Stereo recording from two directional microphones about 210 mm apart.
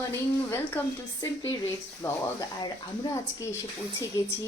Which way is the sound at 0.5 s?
10° left (ahead or behind).